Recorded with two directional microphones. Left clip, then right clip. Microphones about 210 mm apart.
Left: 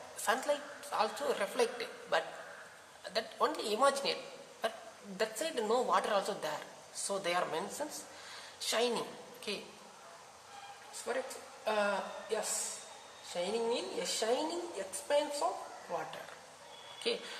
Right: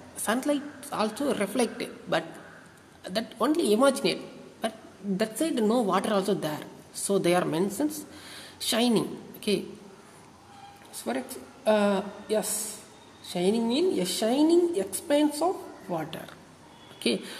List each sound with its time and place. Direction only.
0.2 s a woman's voice: 35° right (ahead or behind)
11.1 s a woman's voice: 40° right (ahead or behind)
17.0 s a woman's voice: 40° right (ahead or behind)